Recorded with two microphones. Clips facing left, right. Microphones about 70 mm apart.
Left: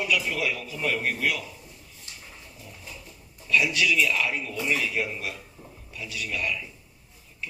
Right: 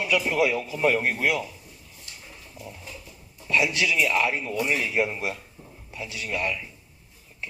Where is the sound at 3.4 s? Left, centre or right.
Right.